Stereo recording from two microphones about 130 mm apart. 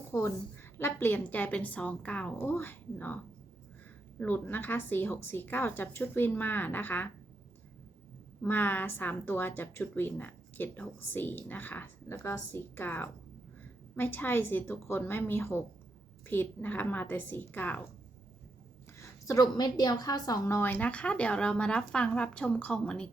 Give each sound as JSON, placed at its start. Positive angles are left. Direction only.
{"t": 0.1, "sound": "a woman's voice", "side_deg": 20}
{"t": 4.2, "sound": "a woman's voice", "side_deg": 15}
{"t": 8.4, "sound": "a woman's voice", "side_deg": 15}
{"t": 18.9, "sound": "a woman's voice", "side_deg": 25}